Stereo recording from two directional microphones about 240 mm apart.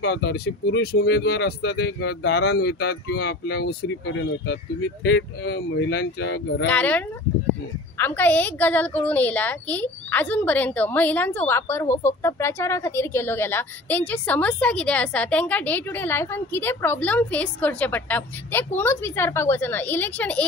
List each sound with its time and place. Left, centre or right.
0.0 s speech: left
6.6 s a woman's voice: centre